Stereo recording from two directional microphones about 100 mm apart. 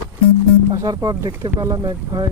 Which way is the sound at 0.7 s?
35° right (ahead or behind).